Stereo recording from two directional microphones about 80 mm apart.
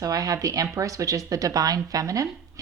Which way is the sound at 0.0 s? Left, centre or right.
Right.